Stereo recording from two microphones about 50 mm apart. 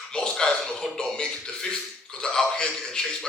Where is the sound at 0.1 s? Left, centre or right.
Centre.